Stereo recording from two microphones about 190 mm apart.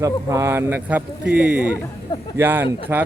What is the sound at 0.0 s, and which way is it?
Speech, 15° right (ahead or behind).